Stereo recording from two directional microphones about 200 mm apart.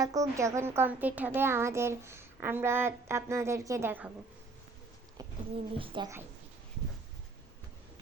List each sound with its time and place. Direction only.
0.0 s speech: 20° right (ahead or behind)
5.1 s speech: 25° right (ahead or behind)